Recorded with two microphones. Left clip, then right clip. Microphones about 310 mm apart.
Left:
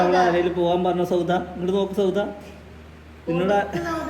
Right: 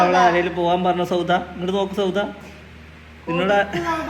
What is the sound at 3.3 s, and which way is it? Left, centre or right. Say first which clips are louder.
Speech: right 3 dB; centre.